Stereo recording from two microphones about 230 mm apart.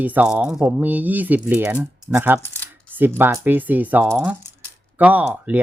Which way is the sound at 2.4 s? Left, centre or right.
Centre.